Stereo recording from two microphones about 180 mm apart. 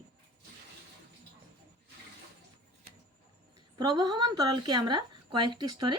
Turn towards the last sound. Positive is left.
turn(degrees=-25)  # may be behind; listen again after turning